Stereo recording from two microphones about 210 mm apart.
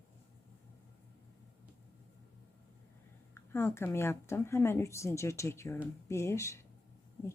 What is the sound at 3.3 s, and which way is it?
Speech, 10° left (ahead or behind).